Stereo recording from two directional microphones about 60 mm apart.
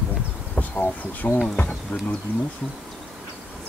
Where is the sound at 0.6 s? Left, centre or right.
Left.